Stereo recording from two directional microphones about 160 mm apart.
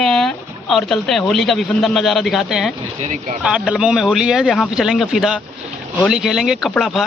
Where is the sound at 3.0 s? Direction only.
50° right (ahead or behind).